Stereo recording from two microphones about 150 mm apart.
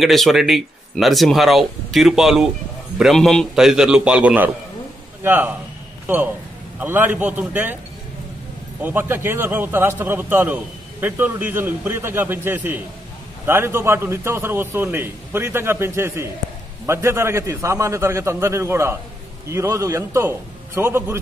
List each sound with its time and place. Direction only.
0.0 s a man's voice: centre (ahead or behind)
8.8 s a man's voice: 15° right (ahead or behind)